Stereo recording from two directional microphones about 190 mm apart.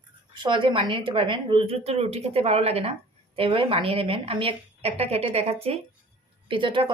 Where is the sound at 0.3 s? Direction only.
25° right (ahead or behind).